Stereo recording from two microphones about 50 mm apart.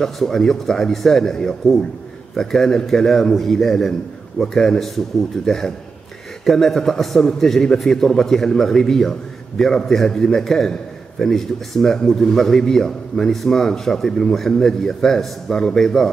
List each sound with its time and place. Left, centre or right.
0.0 s a man's voice: centre